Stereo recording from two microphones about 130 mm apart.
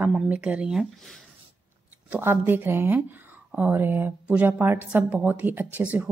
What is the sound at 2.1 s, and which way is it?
Speech, 15° right (ahead or behind).